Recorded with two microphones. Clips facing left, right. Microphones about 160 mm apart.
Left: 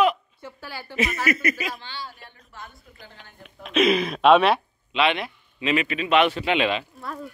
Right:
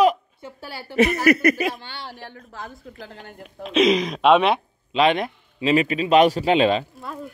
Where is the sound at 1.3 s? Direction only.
65° right (ahead or behind); by 3.1 s 90° right.